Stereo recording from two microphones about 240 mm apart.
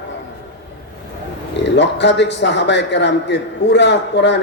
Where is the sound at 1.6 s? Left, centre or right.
Left.